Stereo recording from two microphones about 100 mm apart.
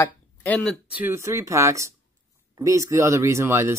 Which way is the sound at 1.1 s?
30° right (ahead or behind).